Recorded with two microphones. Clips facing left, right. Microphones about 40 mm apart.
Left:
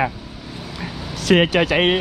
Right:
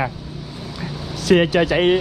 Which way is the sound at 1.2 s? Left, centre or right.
Left.